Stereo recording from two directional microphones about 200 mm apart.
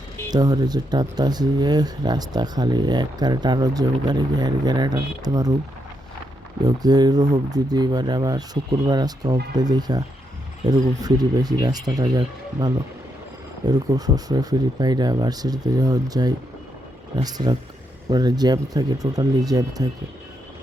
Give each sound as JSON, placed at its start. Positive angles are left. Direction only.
{"t": 0.3, "sound": "speech", "side_deg": -20}
{"t": 6.7, "sound": "speech", "side_deg": -20}